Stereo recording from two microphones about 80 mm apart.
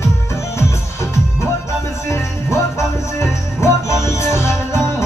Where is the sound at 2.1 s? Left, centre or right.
Left.